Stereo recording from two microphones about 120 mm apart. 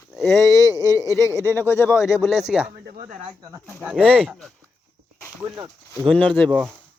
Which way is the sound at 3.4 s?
25° right (ahead or behind).